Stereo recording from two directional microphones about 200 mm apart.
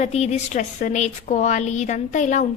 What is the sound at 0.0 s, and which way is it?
A woman's voice, 35° left (ahead or behind).